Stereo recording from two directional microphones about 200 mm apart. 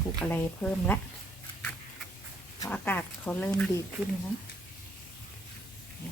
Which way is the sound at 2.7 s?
10° left (ahead or behind).